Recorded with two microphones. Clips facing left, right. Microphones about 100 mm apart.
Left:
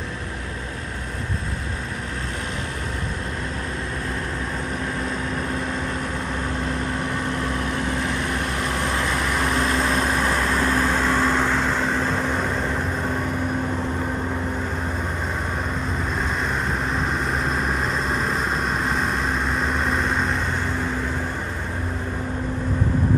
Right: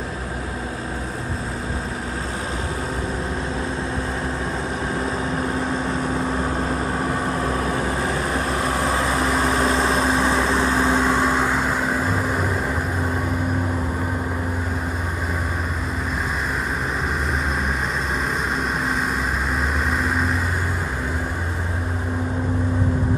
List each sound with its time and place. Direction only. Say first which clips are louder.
9.6 s vehicle: right 2 dB; 25° right (ahead or behind); by 12.5 s 5° right (ahead or behind)
19.9 s vehicle: even; centre (ahead or behind)